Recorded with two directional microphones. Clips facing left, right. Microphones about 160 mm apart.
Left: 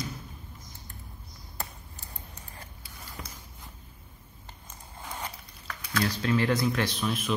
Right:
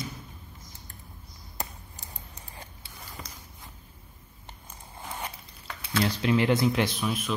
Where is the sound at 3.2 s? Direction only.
Centre (ahead or behind).